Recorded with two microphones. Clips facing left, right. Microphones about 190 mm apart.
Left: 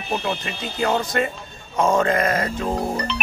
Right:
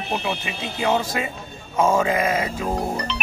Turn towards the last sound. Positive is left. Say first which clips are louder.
# left 2 dB
turn(degrees=50)  # may be behind; listen again after turning